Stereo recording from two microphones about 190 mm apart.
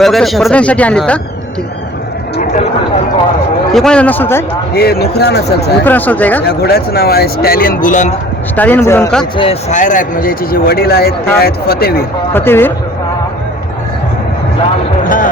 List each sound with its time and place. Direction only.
0.0 s speech: centre (ahead or behind)
2.4 s a sound: 40° left (ahead or behind)
3.7 s a man's voice: centre (ahead or behind)
4.7 s speech: 55° left (ahead or behind)
5.8 s a man's voice: 10° left (ahead or behind)
6.4 s speech: 55° left (ahead or behind); by 8.1 s 40° left (ahead or behind)
8.5 s a man's voice: 10° left (ahead or behind)
9.4 s speech: 35° left (ahead or behind); by 12.0 s 55° left (ahead or behind)
12.3 s a man's voice: 10° left (ahead or behind)
15.0 s speech: 45° left (ahead or behind)